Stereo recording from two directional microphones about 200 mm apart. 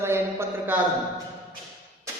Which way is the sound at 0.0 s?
15° right (ahead or behind).